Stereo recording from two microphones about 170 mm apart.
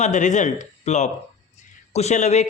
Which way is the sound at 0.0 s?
45° left (ahead or behind).